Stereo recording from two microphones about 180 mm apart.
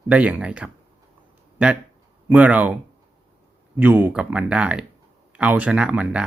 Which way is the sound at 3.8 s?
10° right (ahead or behind).